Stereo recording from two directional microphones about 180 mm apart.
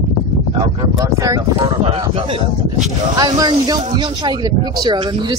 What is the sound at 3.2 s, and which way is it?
Speech, 20° right (ahead or behind).